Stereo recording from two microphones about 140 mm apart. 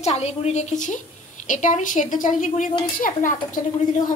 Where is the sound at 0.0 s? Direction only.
50° left (ahead or behind).